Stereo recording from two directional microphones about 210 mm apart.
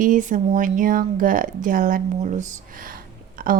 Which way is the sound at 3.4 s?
40° right (ahead or behind).